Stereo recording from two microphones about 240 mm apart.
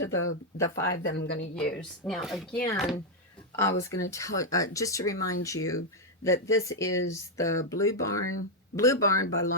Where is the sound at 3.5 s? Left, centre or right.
Centre.